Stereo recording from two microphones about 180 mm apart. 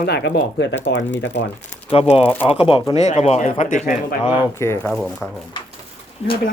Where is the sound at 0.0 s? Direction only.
70° left (ahead or behind).